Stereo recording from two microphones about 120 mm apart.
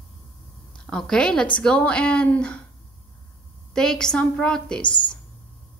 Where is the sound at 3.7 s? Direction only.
5° left (ahead or behind).